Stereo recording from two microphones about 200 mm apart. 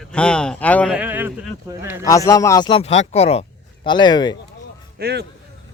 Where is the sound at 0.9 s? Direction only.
10° right (ahead or behind).